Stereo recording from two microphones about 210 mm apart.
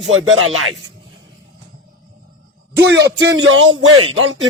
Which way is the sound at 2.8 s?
55° right (ahead or behind).